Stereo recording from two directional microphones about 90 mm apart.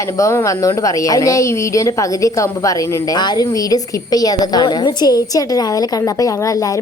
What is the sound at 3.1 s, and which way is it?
A woman's voice, 50° left (ahead or behind).